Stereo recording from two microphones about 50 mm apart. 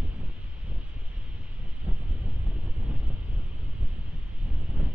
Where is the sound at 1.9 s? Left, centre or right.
Centre.